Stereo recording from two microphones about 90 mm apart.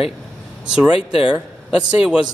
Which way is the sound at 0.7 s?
10° right (ahead or behind).